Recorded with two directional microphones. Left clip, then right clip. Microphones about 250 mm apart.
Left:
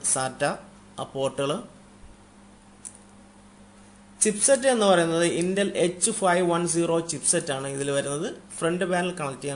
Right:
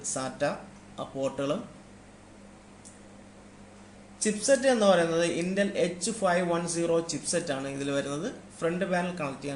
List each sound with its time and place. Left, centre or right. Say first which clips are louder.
0.1 s a man's voice: left 4 dB; left
4.2 s a man's voice: left 3 dB; left